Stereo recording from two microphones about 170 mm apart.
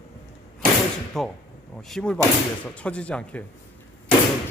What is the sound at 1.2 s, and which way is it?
Speech, centre (ahead or behind).